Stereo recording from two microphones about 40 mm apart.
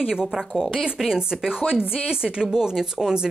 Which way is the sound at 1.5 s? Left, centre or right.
Centre.